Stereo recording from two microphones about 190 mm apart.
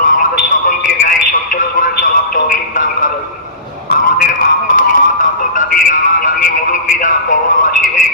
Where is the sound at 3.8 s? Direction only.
45° left (ahead or behind).